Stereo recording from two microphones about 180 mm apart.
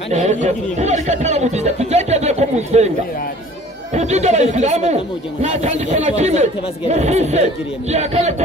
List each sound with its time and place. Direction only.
0.1 s speech: 40° right (ahead or behind)
3.9 s speech: 40° right (ahead or behind)